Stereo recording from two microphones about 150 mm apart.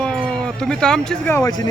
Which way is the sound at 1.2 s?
15° left (ahead or behind).